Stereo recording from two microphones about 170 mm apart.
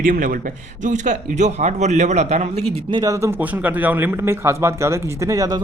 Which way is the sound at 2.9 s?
20° right (ahead or behind).